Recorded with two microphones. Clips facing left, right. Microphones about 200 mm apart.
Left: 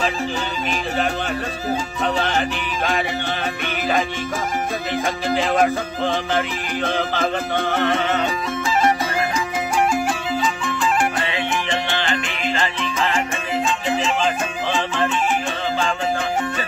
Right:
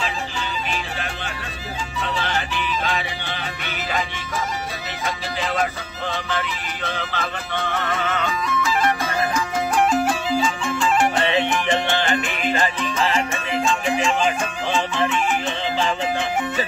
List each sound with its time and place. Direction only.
2.0 s music: 45° left (ahead or behind)
5.0 s music: 50° left (ahead or behind)
11.9 s music: 20° right (ahead or behind)